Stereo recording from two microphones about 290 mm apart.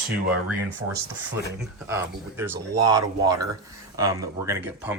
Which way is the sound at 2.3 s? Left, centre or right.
Centre.